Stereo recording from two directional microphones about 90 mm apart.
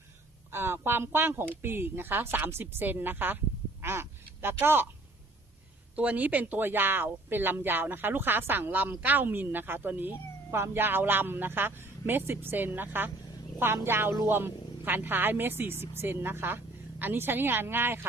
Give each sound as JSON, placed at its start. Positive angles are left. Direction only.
{"t": 0.5, "sound": "speech", "side_deg": -25}
{"t": 6.0, "sound": "speech", "side_deg": -15}